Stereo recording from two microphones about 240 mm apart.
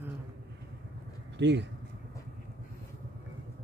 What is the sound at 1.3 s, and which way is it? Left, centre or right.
Speech, right.